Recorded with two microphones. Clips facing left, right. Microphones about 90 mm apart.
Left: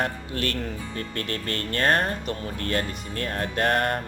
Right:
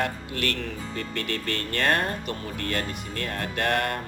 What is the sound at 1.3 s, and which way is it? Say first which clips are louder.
Speech: even; 35° left (ahead or behind).